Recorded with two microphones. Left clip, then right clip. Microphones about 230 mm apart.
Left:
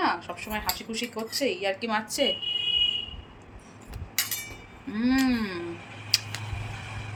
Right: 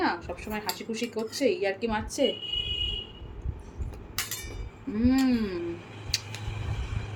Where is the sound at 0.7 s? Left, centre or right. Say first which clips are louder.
Left 1 dB; left.